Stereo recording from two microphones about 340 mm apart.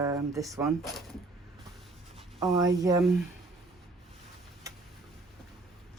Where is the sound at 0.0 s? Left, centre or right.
Centre.